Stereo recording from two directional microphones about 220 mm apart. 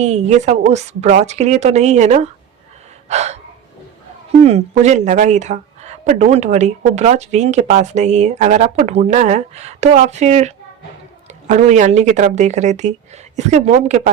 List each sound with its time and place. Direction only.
0.0 s speech: 30° right (ahead or behind)
4.4 s speech: 30° right (ahead or behind)